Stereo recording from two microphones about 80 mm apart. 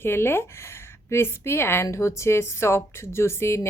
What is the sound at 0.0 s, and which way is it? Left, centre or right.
A woman's voice, left.